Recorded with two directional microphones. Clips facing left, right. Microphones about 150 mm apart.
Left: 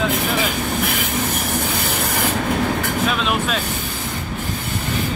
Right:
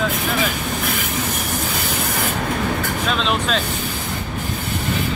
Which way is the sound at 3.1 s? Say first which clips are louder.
Even; 10° left (ahead or behind).